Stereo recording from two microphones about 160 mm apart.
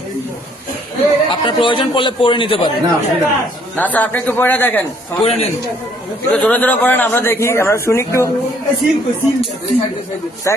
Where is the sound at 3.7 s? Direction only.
10° left (ahead or behind).